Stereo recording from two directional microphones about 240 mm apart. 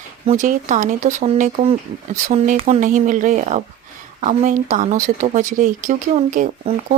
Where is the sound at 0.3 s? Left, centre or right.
Right.